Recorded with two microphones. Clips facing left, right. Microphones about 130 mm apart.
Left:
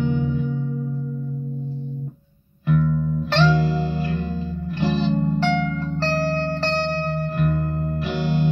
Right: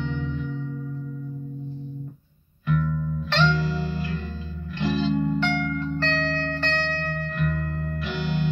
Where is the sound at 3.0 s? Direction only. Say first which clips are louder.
Left 4 dB; 40° left (ahead or behind).